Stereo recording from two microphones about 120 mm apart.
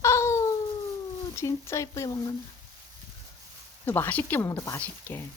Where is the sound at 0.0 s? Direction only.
25° left (ahead or behind).